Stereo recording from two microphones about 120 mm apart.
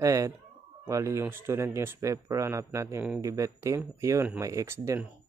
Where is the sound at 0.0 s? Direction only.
25° right (ahead or behind).